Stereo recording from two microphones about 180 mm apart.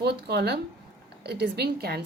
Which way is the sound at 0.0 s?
65° right (ahead or behind).